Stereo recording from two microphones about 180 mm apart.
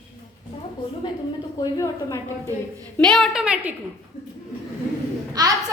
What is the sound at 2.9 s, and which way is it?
Speech, 5° left (ahead or behind).